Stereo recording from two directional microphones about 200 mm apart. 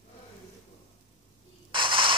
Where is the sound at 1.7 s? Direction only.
25° right (ahead or behind).